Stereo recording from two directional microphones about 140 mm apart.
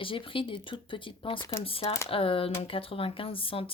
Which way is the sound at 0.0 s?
40° left (ahead or behind).